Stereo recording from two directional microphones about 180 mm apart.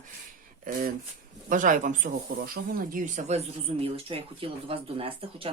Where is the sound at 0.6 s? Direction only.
45° right (ahead or behind).